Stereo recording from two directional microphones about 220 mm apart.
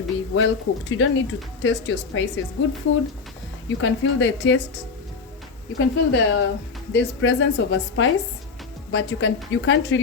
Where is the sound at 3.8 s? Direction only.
60° left (ahead or behind).